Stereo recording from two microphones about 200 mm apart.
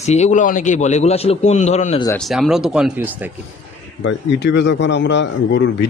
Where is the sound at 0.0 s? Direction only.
35° left (ahead or behind).